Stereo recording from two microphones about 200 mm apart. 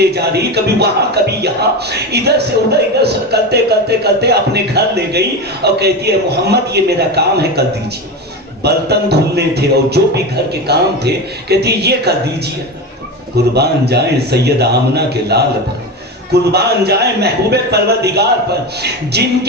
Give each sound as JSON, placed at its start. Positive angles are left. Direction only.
{"t": 0.0, "sound": "a man's voice", "side_deg": -55}
{"t": 3.5, "sound": "a man's voice", "side_deg": -55}
{"t": 8.6, "sound": "a man's voice", "side_deg": -55}
{"t": 13.5, "sound": "a man's voice", "side_deg": -55}